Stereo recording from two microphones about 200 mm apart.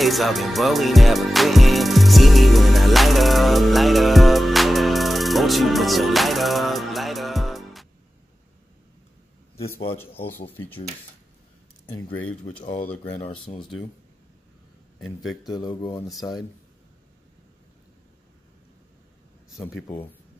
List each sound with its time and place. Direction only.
0.0 s music: centre (ahead or behind)
9.9 s speech: 10° left (ahead or behind)
12.8 s speech: 10° left (ahead or behind)
13.5 s speech: 25° left (ahead or behind)
15.0 s a man's voice: centre (ahead or behind)
15.4 s speech: 20° left (ahead or behind)
16.1 s a man's voice: centre (ahead or behind)